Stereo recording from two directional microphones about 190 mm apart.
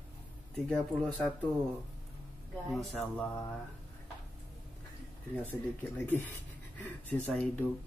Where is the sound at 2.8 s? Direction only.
5° left (ahead or behind).